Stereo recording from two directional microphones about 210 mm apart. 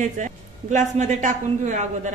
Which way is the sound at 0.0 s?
35° right (ahead or behind).